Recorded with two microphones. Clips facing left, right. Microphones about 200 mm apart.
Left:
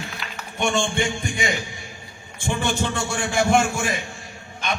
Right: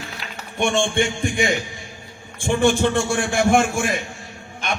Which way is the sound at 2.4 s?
55° right (ahead or behind).